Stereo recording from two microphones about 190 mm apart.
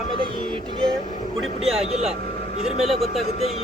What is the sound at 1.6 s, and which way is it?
Speech, 35° right (ahead or behind).